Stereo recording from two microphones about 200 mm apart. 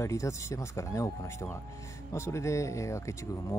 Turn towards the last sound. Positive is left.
turn(degrees=15)  # may be behind; listen again after turning